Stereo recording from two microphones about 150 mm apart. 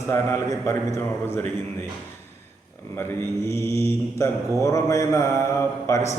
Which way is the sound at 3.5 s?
15° left (ahead or behind).